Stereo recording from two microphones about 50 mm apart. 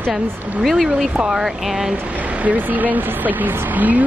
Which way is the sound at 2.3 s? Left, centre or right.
Right.